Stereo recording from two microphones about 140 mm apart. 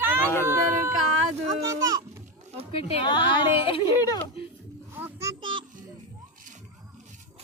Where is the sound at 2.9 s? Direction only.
35° left (ahead or behind).